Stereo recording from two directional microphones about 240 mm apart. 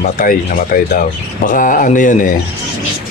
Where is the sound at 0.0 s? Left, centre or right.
Left.